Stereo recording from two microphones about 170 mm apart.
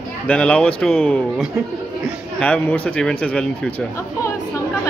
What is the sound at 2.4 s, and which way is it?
A man's voice, 10° left (ahead or behind).